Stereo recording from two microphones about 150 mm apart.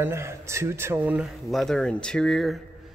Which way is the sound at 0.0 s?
20° right (ahead or behind).